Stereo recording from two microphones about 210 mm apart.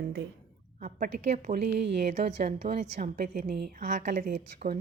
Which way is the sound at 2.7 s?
35° right (ahead or behind).